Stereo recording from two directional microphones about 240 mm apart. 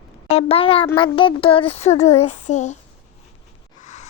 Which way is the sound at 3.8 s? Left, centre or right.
Left.